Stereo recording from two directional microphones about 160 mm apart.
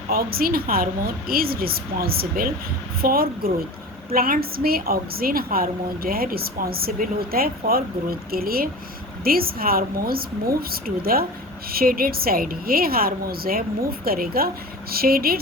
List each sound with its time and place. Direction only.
0.1 s a woman's voice: 70° right (ahead or behind)